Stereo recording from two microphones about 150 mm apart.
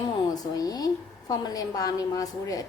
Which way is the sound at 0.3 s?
25° left (ahead or behind).